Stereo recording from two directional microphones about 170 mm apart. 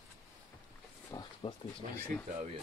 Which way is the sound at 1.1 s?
20° left (ahead or behind).